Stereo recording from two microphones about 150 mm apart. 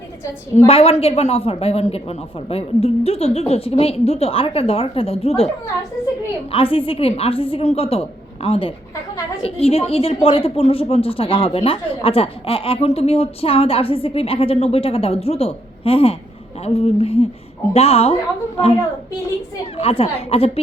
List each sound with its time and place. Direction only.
0.7 s a woman's voice: 40° left (ahead or behind)
6.5 s a woman's voice: 40° left (ahead or behind)
19.7 s a woman's voice: 40° left (ahead or behind)